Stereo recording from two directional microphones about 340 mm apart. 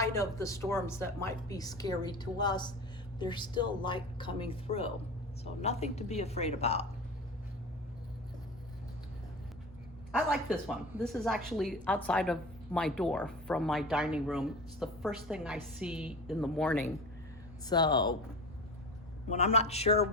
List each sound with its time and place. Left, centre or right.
0.0 s a woman's voice: centre
10.1 s a woman's voice: centre
19.3 s speech: centre